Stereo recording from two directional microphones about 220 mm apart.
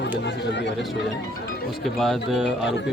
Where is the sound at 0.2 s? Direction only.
55° left (ahead or behind).